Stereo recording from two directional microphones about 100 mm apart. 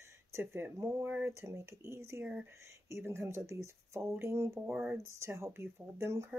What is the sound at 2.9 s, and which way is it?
Speech, 25° right (ahead or behind).